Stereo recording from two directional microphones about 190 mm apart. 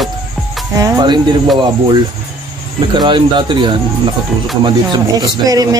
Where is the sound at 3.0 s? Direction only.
25° right (ahead or behind).